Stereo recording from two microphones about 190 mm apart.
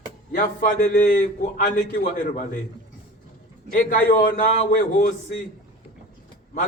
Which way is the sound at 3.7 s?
45° left (ahead or behind).